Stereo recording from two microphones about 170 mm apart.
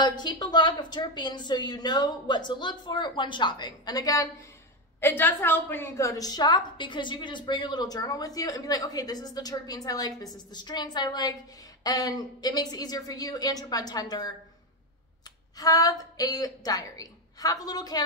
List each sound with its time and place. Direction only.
0.0 s a woman's voice: 25° left (ahead or behind)
15.5 s a woman's voice: 20° left (ahead or behind)